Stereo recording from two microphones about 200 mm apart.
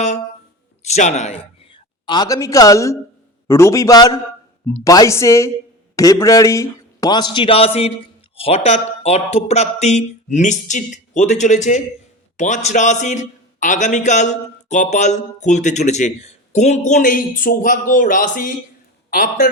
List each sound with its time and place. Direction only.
0.9 s a man's voice: 35° left (ahead or behind)